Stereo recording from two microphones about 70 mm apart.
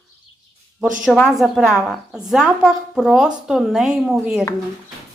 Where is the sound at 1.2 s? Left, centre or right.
Centre.